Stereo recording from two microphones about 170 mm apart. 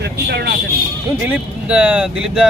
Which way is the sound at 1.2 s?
10° right (ahead or behind).